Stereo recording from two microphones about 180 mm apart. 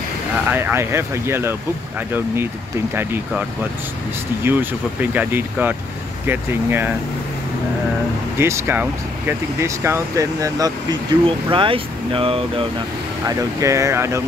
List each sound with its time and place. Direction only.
0.5 s speech: 10° right (ahead or behind)
2.9 s speech: 10° right (ahead or behind)
5.1 s speech: 10° right (ahead or behind)
8.4 s speech: 15° right (ahead or behind); by 12.6 s 30° right (ahead or behind)
13.6 s speech: 15° right (ahead or behind)